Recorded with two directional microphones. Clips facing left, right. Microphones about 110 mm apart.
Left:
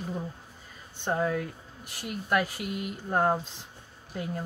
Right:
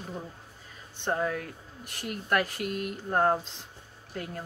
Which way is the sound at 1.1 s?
5° left (ahead or behind).